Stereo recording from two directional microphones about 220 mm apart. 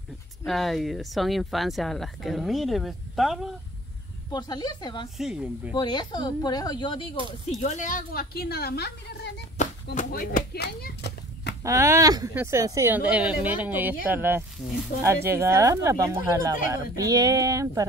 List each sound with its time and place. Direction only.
0.4 s speech: centre (ahead or behind)
4.3 s speech: 20° left (ahead or behind)
5.1 s speech: 5° right (ahead or behind)
5.8 s speech: 20° left (ahead or behind); by 11.5 s 50° left (ahead or behind)
11.6 s speech: 15° right (ahead or behind)